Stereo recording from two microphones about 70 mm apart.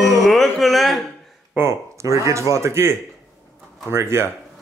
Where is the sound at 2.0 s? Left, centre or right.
Right.